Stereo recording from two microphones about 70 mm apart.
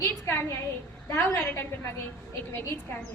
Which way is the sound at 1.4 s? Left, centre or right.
Left.